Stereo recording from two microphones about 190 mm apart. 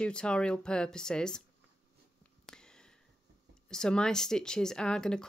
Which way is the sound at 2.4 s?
5° left (ahead or behind).